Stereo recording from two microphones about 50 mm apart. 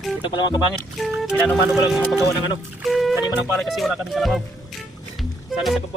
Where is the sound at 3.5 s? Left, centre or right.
Centre.